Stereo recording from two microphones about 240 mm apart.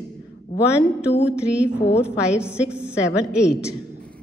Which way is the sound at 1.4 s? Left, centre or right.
Centre.